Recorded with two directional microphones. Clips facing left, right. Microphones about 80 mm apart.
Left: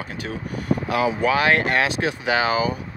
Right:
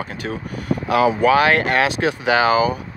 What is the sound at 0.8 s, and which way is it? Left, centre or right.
Speech, right.